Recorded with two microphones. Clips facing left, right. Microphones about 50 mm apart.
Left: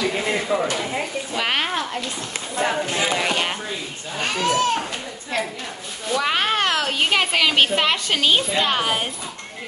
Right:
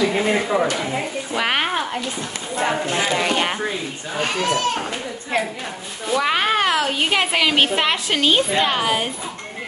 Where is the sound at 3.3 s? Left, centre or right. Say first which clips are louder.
Right 2 dB; centre.